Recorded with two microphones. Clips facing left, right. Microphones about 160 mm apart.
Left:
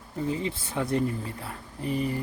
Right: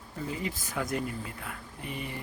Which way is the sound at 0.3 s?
25° left (ahead or behind).